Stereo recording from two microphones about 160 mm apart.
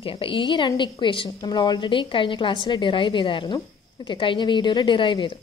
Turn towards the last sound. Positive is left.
turn(degrees=30)  # may be behind; listen again after turning